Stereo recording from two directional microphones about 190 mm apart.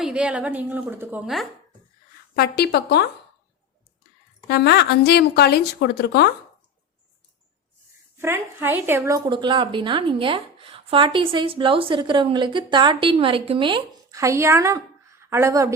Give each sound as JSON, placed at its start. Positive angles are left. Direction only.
{"t": 0.0, "sound": "a woman's voice", "side_deg": -5}
{"t": 2.3, "sound": "speech", "side_deg": 55}
{"t": 4.4, "sound": "speech", "side_deg": 60}
{"t": 8.2, "sound": "a woman's voice", "side_deg": -10}